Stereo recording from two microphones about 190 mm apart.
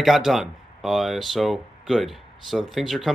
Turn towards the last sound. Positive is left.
turn(degrees=0)  # may be behind; listen again after turning